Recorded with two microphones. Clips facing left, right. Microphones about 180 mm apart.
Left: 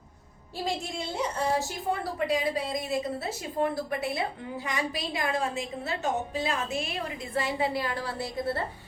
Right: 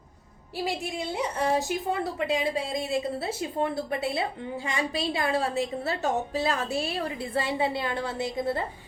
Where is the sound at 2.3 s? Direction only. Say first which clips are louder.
Even; 25° right (ahead or behind).